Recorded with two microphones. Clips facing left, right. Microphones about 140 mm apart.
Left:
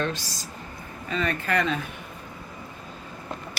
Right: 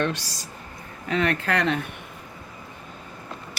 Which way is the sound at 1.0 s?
80° right.